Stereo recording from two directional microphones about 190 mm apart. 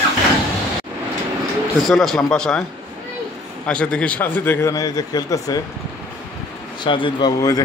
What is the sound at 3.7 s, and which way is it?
A man's voice, 5° left (ahead or behind).